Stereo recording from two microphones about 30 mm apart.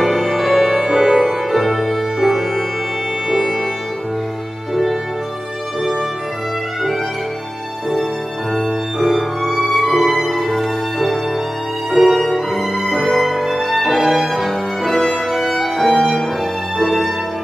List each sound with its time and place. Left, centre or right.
0.0 s music: centre
0.7 s music: centre
1.2 s music: centre
2.1 s music: centre
9.0 s music: centre
11.9 s music: centre
12.4 s music: centre